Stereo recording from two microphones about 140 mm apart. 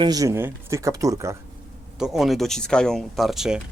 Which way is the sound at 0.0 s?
25° right (ahead or behind).